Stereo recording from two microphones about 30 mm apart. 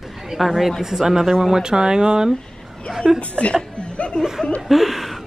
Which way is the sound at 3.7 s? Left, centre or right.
Left.